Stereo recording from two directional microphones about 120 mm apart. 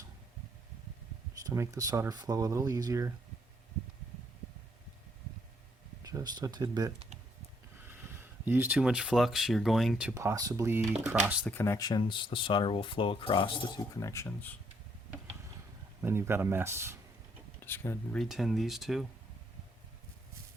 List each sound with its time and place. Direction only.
1.5 s speech: 30° right (ahead or behind)
6.0 s speech: 30° right (ahead or behind)
7.9 s a sound: 15° right (ahead or behind)
8.8 s speech: 5° right (ahead or behind)
10.2 s speech: 25° right (ahead or behind)
11.1 s speech: 10° right (ahead or behind)
11.5 s speech: 25° left (ahead or behind)
11.9 s speech: 40° left (ahead or behind)
14.0 s speech: 25° left (ahead or behind)
16.0 s speech: 20° right (ahead or behind)
17.6 s speech: 20° left (ahead or behind)
18.1 s speech: centre (ahead or behind)